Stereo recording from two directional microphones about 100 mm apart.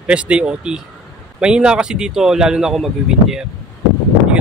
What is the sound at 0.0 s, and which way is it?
A man's voice, 10° right (ahead or behind).